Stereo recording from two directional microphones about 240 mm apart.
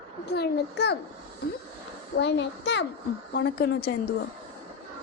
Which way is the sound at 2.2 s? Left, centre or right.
Left.